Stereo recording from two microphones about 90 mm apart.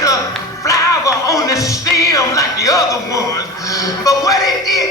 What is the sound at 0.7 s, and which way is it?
Music, 35° left (ahead or behind).